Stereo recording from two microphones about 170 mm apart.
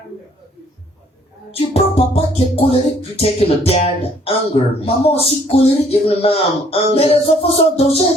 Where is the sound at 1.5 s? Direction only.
35° left (ahead or behind).